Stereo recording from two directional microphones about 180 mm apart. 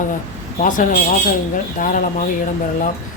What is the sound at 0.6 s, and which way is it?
Speech, 45° left (ahead or behind).